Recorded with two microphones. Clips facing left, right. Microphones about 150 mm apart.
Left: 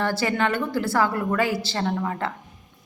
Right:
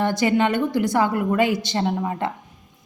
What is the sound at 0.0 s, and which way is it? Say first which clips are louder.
A woman's voice: right 4 dB; 20° right (ahead or behind).